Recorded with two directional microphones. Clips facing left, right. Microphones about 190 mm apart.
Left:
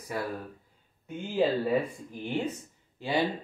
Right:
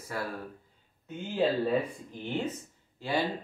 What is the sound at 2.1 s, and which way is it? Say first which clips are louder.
Speech: left 2 dB; 10° left (ahead or behind).